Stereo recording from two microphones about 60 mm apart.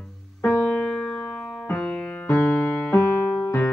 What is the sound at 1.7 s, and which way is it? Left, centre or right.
Music, centre.